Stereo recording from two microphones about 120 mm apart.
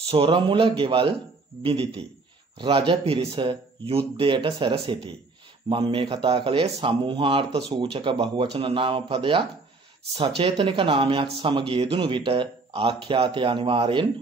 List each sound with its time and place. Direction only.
0.1 s speech: 45° right (ahead or behind)